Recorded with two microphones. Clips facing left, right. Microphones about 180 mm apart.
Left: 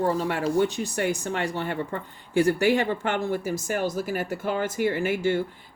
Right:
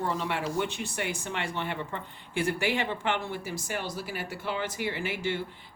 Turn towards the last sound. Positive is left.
turn(degrees=45)  # may be behind; listen again after turning